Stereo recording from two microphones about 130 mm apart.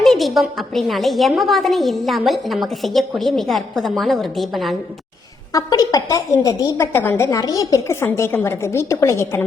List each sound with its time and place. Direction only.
0.0 s a woman's voice: centre (ahead or behind)
5.5 s a woman's voice: 25° left (ahead or behind)
7.3 s a woman's voice: 30° left (ahead or behind)